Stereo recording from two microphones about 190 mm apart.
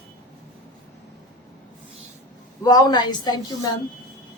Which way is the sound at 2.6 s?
20° left (ahead or behind).